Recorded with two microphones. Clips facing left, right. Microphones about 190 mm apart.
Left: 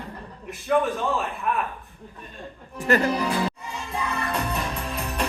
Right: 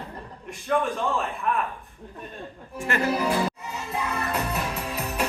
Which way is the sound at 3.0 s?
5° right (ahead or behind).